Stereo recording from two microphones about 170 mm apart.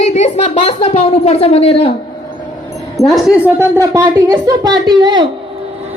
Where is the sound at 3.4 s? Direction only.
15° right (ahead or behind).